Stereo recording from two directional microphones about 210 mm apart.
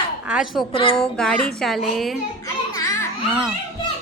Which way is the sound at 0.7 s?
25° left (ahead or behind).